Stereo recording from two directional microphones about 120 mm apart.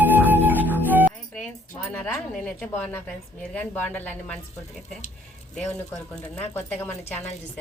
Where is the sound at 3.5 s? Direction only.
15° left (ahead or behind).